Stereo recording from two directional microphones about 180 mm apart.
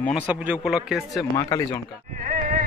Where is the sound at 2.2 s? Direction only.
50° right (ahead or behind).